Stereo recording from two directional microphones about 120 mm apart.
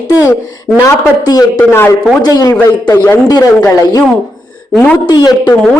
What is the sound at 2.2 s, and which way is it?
A man's voice, 30° left (ahead or behind).